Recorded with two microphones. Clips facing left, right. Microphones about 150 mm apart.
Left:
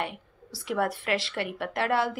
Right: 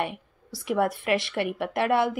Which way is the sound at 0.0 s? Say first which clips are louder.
Right 3 dB; 20° right (ahead or behind).